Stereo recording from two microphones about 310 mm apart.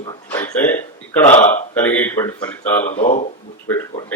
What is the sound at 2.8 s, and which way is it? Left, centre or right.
Speech, left.